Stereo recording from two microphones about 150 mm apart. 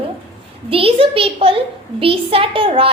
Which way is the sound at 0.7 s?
40° right (ahead or behind).